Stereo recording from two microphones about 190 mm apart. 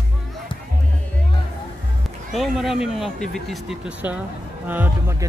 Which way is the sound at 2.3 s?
Centre (ahead or behind).